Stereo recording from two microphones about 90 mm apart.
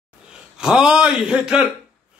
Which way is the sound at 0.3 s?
10° right (ahead or behind).